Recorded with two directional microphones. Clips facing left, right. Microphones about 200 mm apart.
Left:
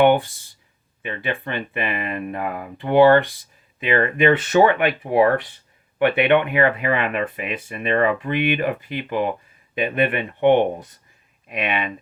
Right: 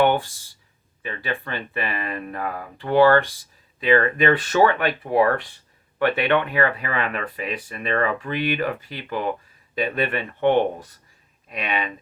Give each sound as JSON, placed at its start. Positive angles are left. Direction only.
{"t": 0.0, "sound": "speech", "side_deg": 20}